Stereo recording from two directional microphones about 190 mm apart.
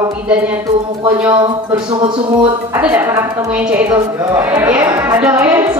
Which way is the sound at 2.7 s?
10° right (ahead or behind).